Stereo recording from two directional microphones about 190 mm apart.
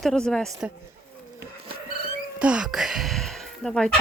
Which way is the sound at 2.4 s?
5° right (ahead or behind).